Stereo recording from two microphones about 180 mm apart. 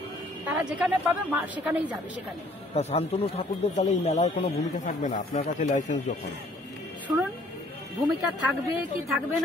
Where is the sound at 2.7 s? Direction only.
35° left (ahead or behind).